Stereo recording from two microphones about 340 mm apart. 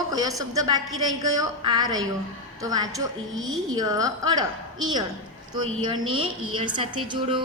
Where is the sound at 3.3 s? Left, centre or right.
Right.